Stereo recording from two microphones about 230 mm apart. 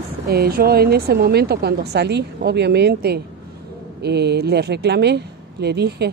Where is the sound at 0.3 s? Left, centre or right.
Right.